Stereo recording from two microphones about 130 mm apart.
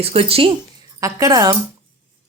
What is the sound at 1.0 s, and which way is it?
Speech, 25° right (ahead or behind).